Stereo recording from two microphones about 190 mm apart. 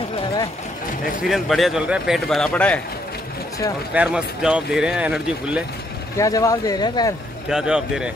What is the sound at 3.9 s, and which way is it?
Speech, 5° right (ahead or behind).